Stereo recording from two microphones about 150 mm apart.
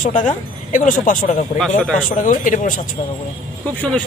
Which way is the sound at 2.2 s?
60° left (ahead or behind).